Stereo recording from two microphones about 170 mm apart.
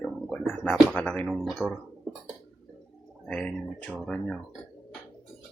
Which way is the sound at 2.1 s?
5° left (ahead or behind).